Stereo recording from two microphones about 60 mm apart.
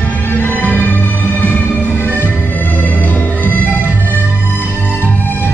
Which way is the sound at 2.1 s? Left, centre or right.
Left.